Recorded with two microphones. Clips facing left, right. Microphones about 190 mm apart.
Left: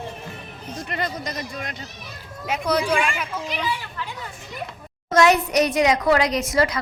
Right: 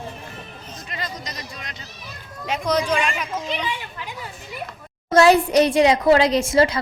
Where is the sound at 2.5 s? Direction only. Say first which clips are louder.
Even; 10° left (ahead or behind).